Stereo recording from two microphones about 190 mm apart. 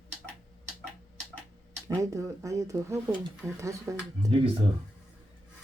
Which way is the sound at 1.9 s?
15° right (ahead or behind).